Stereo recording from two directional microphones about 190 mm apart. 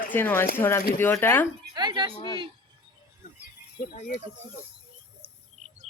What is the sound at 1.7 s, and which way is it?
Speech, 25° right (ahead or behind).